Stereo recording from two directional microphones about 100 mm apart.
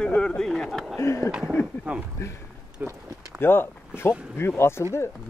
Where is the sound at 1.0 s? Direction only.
30° left (ahead or behind).